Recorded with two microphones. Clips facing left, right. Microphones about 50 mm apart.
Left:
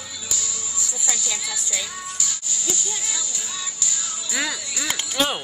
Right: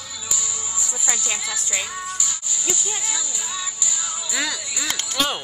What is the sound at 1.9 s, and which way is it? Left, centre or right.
Music, centre.